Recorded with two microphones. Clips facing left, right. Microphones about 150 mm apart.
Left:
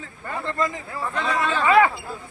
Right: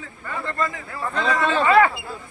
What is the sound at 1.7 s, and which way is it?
Speech, 15° left (ahead or behind).